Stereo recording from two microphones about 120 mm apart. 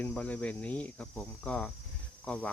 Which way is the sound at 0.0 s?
10° left (ahead or behind).